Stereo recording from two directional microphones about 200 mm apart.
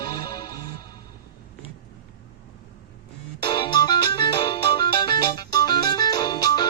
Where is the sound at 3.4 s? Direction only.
25° left (ahead or behind).